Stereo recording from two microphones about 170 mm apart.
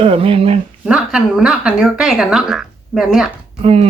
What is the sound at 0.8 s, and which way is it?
Speech, 5° right (ahead or behind).